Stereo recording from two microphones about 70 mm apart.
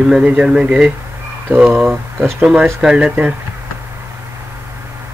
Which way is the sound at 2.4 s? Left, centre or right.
Centre.